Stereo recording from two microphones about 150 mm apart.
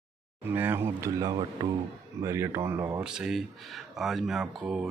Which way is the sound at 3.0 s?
5° right (ahead or behind).